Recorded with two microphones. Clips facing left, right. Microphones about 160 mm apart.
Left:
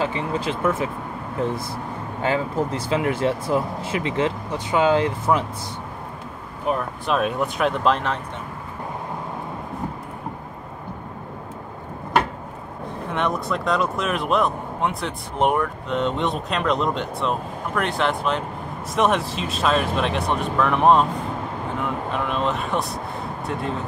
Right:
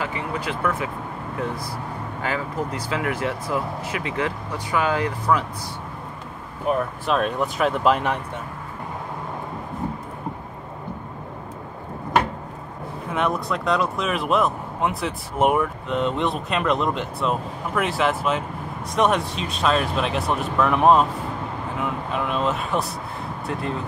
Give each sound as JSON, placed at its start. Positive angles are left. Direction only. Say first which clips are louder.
{"t": 0.0, "sound": "speech", "louder": "left 3 dB", "side_deg": 25}
{"t": 2.2, "sound": "speech", "louder": "left 5 dB", "side_deg": 25}
{"t": 7.1, "sound": "speech", "louder": "left 1 dB", "side_deg": 5}
{"t": 13.1, "sound": "speech", "louder": "even", "side_deg": 0}
{"t": 22.1, "sound": "speech", "louder": "right 1 dB", "side_deg": 0}